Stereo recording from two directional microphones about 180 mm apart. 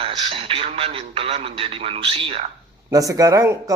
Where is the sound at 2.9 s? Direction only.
20° right (ahead or behind).